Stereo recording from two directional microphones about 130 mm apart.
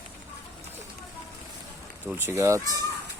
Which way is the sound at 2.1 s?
20° right (ahead or behind).